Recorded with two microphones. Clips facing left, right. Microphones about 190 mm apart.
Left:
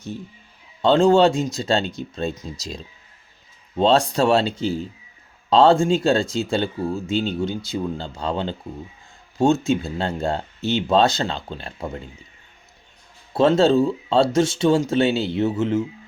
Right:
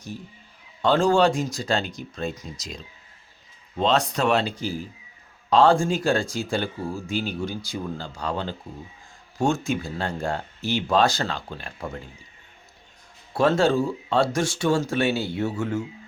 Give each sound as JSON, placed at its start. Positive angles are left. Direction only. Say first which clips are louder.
{"t": 0.8, "sound": "speech", "louder": "left 4 dB", "side_deg": 25}
{"t": 13.3, "sound": "speech", "louder": "left 4 dB", "side_deg": 25}